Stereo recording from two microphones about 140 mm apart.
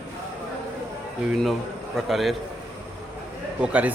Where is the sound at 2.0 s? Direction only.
Centre (ahead or behind).